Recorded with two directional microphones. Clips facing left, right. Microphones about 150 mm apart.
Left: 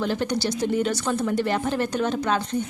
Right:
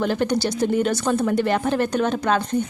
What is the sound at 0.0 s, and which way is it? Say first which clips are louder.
A woman's voice: right 3 dB; 55° right (ahead or behind).